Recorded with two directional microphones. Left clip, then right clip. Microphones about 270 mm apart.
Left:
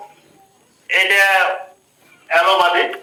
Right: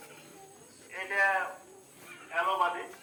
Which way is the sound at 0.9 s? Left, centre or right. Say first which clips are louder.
Left 16 dB; left.